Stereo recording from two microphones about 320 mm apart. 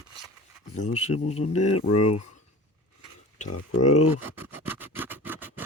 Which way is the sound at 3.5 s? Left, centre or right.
Left.